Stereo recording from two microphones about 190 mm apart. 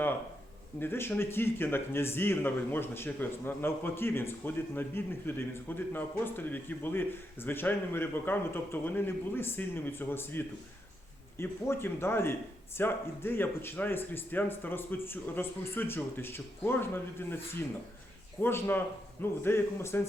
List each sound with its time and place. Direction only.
0.8 s speech: 10° left (ahead or behind)